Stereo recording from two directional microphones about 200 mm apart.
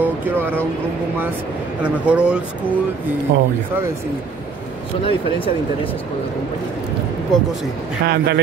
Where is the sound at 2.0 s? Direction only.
5° right (ahead or behind).